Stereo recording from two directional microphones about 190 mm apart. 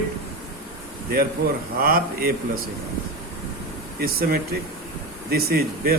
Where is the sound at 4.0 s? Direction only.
55° right (ahead or behind).